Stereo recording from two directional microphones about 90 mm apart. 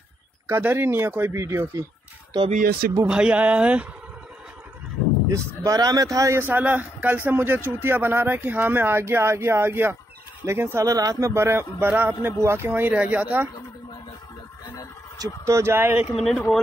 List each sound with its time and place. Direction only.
0.5 s speech: 25° right (ahead or behind)
2.3 s speech: 55° right (ahead or behind)
3.1 s speech: 10° right (ahead or behind)
5.6 s speech: 40° right (ahead or behind)
6.4 s speech: 20° right (ahead or behind)
10.9 s speech: 40° right (ahead or behind); by 13.5 s 20° right (ahead or behind)
15.4 s speech: 30° right (ahead or behind)
16.3 s speech: 10° left (ahead or behind)